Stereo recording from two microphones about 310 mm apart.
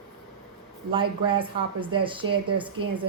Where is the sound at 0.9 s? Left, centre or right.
Centre.